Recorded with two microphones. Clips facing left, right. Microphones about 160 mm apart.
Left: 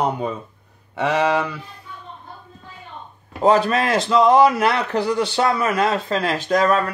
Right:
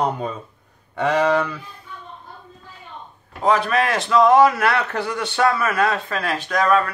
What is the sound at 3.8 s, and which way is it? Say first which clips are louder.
A man's voice: right 1 dB; 25° left (ahead or behind).